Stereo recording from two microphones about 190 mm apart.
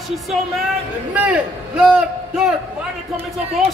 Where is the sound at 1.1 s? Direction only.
5° right (ahead or behind).